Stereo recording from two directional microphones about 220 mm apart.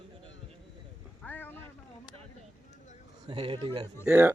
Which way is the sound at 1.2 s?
10° left (ahead or behind).